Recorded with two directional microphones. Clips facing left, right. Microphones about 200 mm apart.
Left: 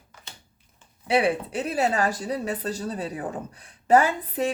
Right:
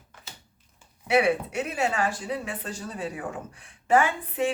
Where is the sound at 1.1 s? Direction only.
30° left (ahead or behind).